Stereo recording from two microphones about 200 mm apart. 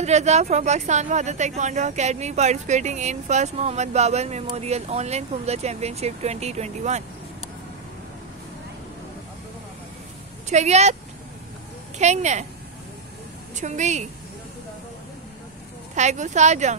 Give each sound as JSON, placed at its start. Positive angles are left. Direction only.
{"t": 0.0, "sound": "speech", "side_deg": -35}
{"t": 10.5, "sound": "speech", "side_deg": -35}
{"t": 12.0, "sound": "speech", "side_deg": -35}
{"t": 13.6, "sound": "speech", "side_deg": -35}
{"t": 15.9, "sound": "speech", "side_deg": -35}